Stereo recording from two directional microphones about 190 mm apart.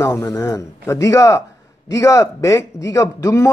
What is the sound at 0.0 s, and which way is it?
A man's voice, 15° left (ahead or behind).